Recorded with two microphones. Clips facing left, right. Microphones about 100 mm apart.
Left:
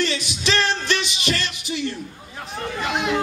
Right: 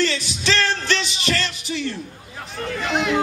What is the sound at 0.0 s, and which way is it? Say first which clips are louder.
Music: right 1 dB; 20° left (ahead or behind).